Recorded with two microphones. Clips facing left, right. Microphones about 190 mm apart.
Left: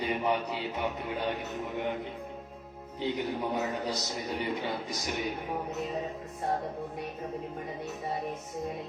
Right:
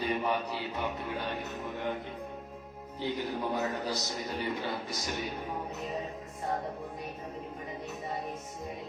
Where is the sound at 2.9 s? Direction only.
15° left (ahead or behind).